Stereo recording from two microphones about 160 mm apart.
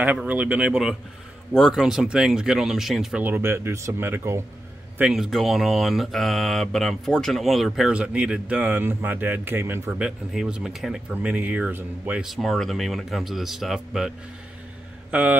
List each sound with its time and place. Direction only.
0.0 s speech: 10° right (ahead or behind)